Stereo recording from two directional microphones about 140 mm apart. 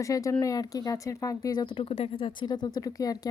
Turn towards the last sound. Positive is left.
turn(degrees=25)  # may be behind; listen again after turning